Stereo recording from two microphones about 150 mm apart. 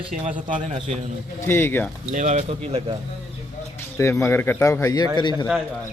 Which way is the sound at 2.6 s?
40° right (ahead or behind).